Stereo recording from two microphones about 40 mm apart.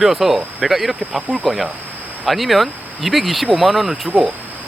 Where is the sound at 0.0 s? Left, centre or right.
Centre.